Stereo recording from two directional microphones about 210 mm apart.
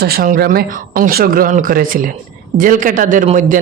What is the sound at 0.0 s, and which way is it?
Speech, 45° right (ahead or behind).